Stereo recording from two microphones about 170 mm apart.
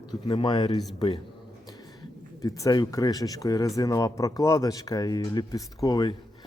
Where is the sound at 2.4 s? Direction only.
20° left (ahead or behind).